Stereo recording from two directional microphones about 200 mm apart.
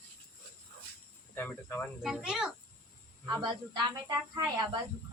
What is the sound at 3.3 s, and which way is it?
Speech, 20° right (ahead or behind).